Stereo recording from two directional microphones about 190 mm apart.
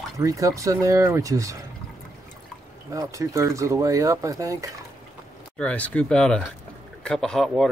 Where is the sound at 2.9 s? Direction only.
15° right (ahead or behind).